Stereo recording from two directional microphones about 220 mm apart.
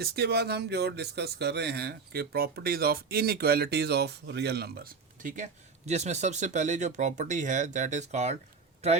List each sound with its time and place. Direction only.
0.0 s speech: 45° right (ahead or behind); by 9.0 s 30° right (ahead or behind)